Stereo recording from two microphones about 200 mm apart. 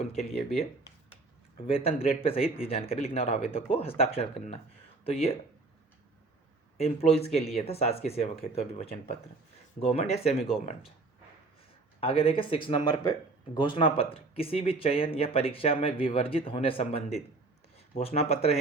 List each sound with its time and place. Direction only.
1.6 s speech: 25° left (ahead or behind)
6.7 s speech: 30° left (ahead or behind)
11.9 s speech: 30° left (ahead or behind)